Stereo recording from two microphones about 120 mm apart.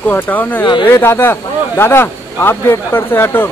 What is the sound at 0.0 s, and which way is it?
Speech, 15° left (ahead or behind).